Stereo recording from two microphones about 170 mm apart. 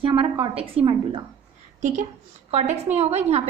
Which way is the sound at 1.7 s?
45° right (ahead or behind).